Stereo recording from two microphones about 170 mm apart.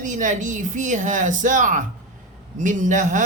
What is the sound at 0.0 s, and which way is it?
A man's voice, 50° right (ahead or behind).